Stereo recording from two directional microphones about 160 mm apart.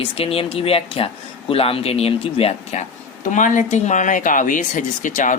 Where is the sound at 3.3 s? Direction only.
50° left (ahead or behind).